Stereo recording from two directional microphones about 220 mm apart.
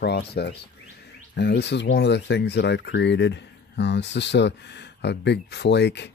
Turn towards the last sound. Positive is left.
turn(degrees=50)  # may be behind; listen again after turning